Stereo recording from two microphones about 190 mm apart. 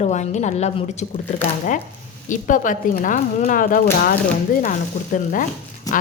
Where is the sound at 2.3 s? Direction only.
45° left (ahead or behind).